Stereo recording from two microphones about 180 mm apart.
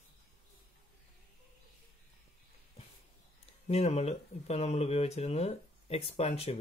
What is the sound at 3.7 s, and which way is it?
Speech, 35° left (ahead or behind).